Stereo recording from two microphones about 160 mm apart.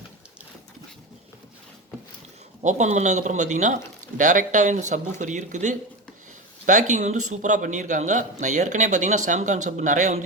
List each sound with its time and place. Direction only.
2.6 s a man's voice: 50° right (ahead or behind)